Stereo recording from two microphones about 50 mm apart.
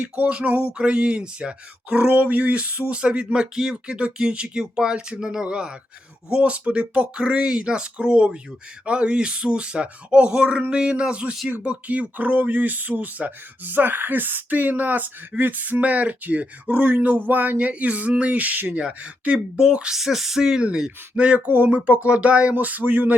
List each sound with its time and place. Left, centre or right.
0.0 s speech: right
2.1 s speech: right
18.8 s speech: right
19.9 s speech: centre
20.7 s speech: centre
21.3 s speech: right
21.7 s speech: right
22.5 s speech: right